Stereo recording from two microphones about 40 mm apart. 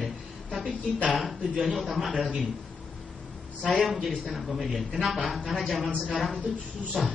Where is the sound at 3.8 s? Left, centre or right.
Centre.